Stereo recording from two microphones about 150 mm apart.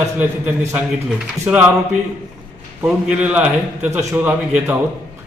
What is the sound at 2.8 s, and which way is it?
A man's voice, 10° right (ahead or behind).